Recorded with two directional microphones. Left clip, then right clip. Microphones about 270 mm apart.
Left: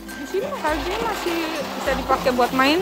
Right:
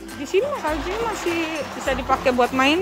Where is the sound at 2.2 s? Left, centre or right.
Centre.